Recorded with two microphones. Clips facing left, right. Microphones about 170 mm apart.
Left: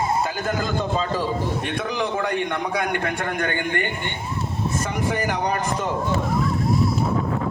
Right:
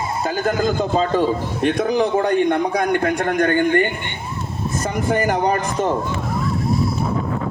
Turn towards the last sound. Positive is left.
turn(degrees=-45)  # may be behind; listen again after turning